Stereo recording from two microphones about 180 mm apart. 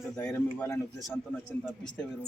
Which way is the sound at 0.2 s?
15° left (ahead or behind).